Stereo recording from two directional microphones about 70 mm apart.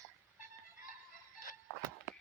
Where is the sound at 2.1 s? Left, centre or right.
Left.